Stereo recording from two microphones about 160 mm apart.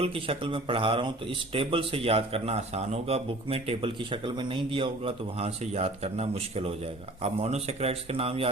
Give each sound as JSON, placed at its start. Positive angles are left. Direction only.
{"t": 0.0, "sound": "speech", "side_deg": -35}